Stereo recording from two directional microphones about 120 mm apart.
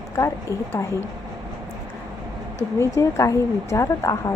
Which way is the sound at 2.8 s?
25° left (ahead or behind).